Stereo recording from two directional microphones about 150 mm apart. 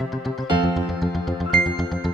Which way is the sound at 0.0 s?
Centre (ahead or behind).